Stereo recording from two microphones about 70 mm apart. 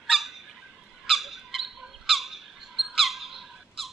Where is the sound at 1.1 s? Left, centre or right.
Centre.